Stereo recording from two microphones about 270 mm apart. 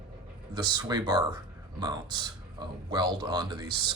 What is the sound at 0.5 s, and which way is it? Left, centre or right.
Speech, centre.